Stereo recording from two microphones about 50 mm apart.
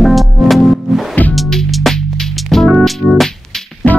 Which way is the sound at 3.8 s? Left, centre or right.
Left.